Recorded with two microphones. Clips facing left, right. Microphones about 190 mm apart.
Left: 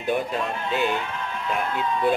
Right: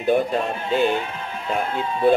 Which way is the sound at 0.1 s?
35° right (ahead or behind).